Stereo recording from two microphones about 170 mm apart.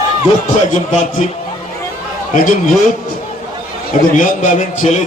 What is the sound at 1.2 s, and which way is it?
A man's voice, 40° left (ahead or behind).